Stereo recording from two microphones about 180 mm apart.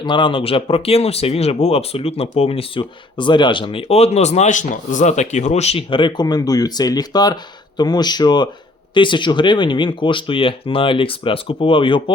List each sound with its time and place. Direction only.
0.0 s speech: 25° left (ahead or behind)